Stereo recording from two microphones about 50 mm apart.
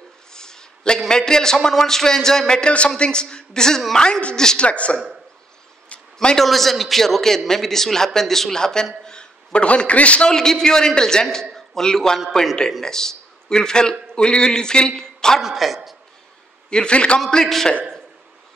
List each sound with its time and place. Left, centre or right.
0.3 s a man's voice: centre
6.1 s a man's voice: centre; by 10.3 s left
10.3 s a man's voice: centre
11.5 s a sound: centre
12.8 s a man's voice: centre
15.4 s a man's voice: centre
16.7 s a man's voice: centre
17.3 s a man's voice: centre